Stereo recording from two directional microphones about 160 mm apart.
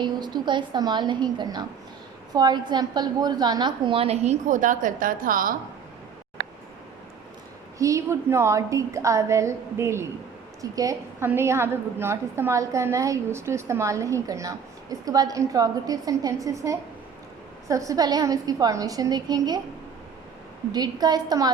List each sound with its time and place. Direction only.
0.0 s a woman's voice: 25° right (ahead or behind); by 5.5 s 60° right (ahead or behind)
7.8 s a woman's voice: 20° right (ahead or behind)
20.7 s a woman's voice: 25° right (ahead or behind)